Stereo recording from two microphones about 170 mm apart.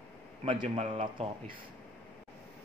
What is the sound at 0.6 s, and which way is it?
Speech, 35° right (ahead or behind).